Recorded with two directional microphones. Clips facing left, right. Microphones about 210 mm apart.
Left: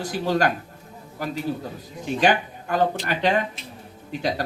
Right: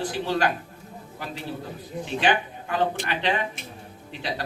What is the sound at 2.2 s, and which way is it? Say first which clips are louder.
A woman's voice: left 4 dB; 40° left (ahead or behind).